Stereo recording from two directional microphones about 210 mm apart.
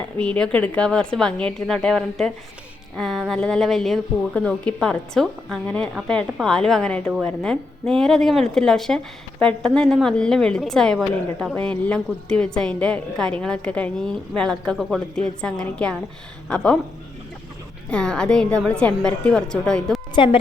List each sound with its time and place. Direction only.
0.0 s a woman's voice: 5° left (ahead or behind)
17.9 s a woman's voice: 5° left (ahead or behind)
20.1 s a woman's voice: 25° left (ahead or behind)